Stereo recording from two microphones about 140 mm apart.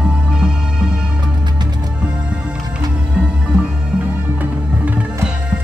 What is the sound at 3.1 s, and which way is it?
Music, 5° right (ahead or behind).